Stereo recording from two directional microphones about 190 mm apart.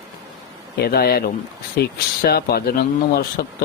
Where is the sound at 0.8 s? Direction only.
55° left (ahead or behind).